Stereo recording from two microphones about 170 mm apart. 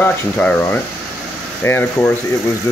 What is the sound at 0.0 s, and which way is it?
Speech, 10° left (ahead or behind).